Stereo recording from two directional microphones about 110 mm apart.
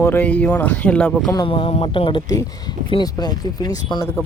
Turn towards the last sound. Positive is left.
turn(degrees=35)  # may be behind; listen again after turning